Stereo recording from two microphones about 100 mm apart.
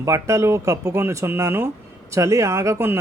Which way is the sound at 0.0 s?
30° right (ahead or behind).